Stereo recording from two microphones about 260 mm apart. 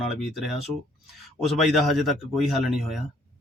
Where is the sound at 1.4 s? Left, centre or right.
Centre.